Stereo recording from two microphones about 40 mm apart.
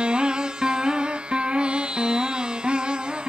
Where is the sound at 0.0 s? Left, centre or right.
Right.